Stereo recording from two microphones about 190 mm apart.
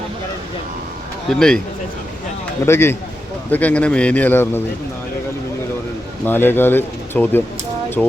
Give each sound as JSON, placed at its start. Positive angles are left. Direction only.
{"t": 1.4, "sound": "speech", "side_deg": 5}
{"t": 2.6, "sound": "speech", "side_deg": 15}
{"t": 6.2, "sound": "speech", "side_deg": 10}